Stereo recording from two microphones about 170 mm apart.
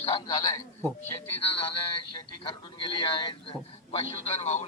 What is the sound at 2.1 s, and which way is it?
A man's voice, 30° left (ahead or behind).